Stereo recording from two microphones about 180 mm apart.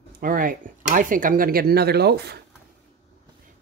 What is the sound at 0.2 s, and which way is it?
Speech, 50° right (ahead or behind).